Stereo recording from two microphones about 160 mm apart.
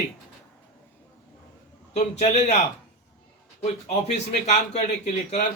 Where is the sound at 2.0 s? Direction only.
45° left (ahead or behind).